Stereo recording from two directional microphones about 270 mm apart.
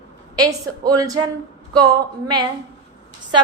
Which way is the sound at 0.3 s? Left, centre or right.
Centre.